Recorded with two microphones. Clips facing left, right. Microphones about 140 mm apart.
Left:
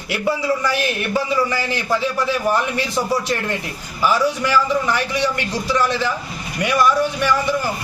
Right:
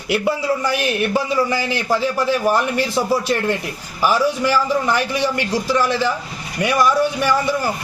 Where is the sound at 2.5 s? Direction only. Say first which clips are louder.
Right 2 dB; 10° right (ahead or behind).